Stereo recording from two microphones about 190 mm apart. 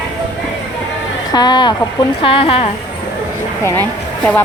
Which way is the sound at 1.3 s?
20° left (ahead or behind).